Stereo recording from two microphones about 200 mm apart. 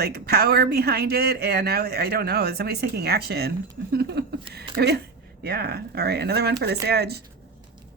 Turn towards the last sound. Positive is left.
turn(degrees=-55)  # may be behind; listen again after turning